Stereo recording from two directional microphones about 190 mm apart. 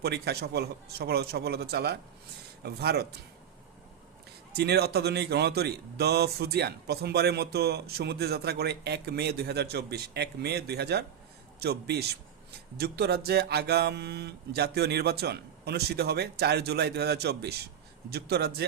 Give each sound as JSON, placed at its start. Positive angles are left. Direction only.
{"t": 0.0, "sound": "speech", "side_deg": -55}
{"t": 4.5, "sound": "speech", "side_deg": -60}